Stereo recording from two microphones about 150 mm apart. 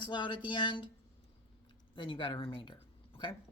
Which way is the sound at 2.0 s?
35° left (ahead or behind).